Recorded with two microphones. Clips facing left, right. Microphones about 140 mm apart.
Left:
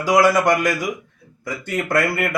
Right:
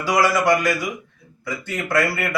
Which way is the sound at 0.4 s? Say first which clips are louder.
Even; 45° left (ahead or behind).